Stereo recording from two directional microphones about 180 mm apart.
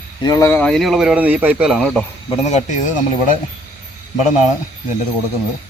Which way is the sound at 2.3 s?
40° left (ahead or behind).